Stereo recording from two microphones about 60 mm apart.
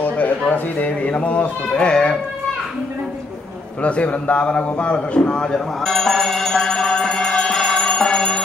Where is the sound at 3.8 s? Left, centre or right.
Left.